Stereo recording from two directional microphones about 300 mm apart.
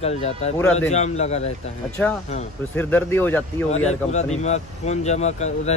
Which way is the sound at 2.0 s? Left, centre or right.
Centre.